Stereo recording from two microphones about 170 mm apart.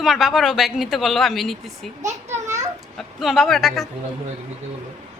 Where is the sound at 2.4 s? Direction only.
45° right (ahead or behind).